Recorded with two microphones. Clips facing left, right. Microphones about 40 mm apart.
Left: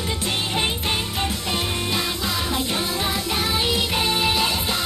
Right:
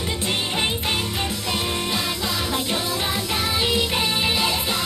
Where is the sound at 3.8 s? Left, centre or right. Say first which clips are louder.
Left 1 dB; centre.